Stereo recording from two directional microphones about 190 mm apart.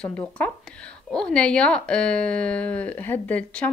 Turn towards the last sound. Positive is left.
turn(degrees=10)  # may be behind; listen again after turning